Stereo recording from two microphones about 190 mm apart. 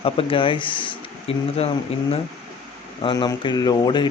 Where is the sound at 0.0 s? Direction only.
30° left (ahead or behind).